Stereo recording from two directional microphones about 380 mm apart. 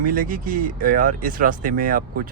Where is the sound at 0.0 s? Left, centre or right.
Right.